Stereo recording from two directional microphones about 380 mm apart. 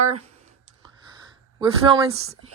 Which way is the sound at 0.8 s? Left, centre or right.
Centre.